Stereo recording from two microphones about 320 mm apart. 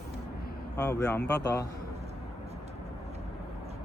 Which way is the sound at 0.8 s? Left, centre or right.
Centre.